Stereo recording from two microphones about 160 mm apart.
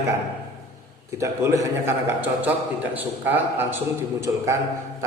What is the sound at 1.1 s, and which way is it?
A man's voice, 20° right (ahead or behind).